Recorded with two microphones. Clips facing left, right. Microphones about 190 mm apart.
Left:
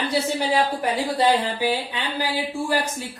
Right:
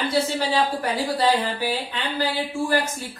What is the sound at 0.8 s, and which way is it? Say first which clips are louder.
A woman's voice: left 1 dB; 20° left (ahead or behind).